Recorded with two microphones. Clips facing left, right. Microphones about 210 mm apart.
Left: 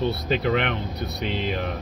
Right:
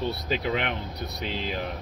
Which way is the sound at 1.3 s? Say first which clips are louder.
Left 5 dB; 55° left (ahead or behind).